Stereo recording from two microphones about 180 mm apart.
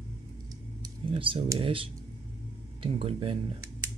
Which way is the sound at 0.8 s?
30° right (ahead or behind).